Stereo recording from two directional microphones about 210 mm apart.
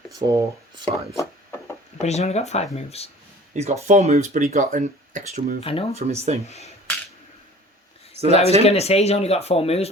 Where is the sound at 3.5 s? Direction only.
35° right (ahead or behind).